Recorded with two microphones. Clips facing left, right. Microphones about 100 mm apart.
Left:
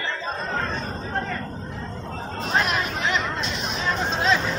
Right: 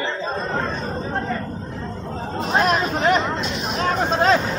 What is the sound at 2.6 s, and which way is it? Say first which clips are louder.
Speech: right 6 dB; 35° right (ahead or behind).